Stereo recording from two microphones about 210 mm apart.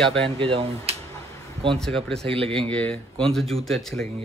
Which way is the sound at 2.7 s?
5° left (ahead or behind).